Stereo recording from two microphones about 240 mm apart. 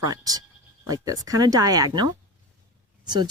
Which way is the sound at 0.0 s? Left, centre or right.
Centre.